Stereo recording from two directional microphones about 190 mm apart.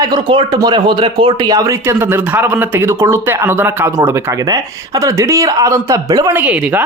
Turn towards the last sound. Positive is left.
turn(degrees=-10)  # may be behind; listen again after turning